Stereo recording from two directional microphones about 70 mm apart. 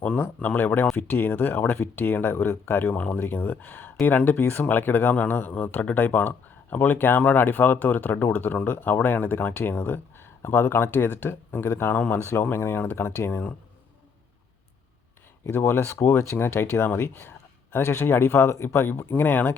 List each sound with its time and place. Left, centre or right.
0.0 s speech: centre; by 13.4 s left
15.4 s speech: left